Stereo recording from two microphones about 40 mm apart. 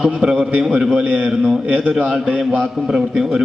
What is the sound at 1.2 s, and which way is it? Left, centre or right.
Speech, centre.